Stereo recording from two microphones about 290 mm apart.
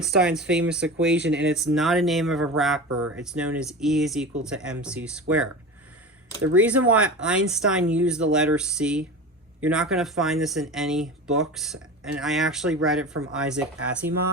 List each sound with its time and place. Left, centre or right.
0.0 s speech: centre
2.9 s speech: right
3.2 s speech: centre
6.5 s speech: centre